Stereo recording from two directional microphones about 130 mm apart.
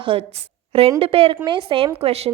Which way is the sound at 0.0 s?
40° right (ahead or behind).